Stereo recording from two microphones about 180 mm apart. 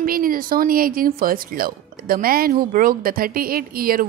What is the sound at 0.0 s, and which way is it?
Speech, 50° right (ahead or behind).